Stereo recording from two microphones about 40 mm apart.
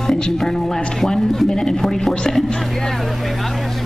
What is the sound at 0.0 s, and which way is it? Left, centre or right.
Speech, centre.